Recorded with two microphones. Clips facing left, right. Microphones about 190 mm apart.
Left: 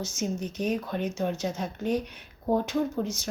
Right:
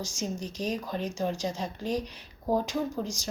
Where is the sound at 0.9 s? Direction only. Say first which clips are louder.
Left 2 dB; 5° left (ahead or behind).